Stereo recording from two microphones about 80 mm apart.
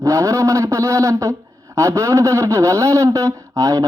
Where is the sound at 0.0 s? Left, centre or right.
Right.